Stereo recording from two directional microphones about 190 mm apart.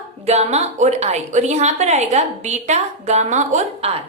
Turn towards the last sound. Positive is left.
turn(degrees=-35)  # may be behind; listen again after turning